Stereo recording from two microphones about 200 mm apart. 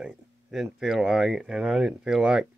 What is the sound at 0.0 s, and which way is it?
Speech, centre (ahead or behind).